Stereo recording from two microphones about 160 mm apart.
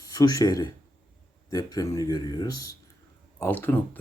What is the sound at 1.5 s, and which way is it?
Speech, 20° left (ahead or behind).